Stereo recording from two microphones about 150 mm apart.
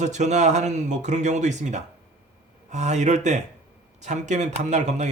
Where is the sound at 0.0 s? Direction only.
50° right (ahead or behind).